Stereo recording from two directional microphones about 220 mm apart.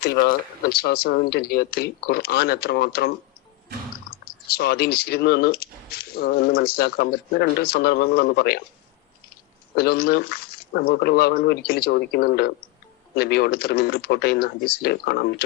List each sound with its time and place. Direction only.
0.0 s speech: 45° left (ahead or behind)
4.5 s speech: 45° left (ahead or behind)
9.7 s speech: 45° left (ahead or behind)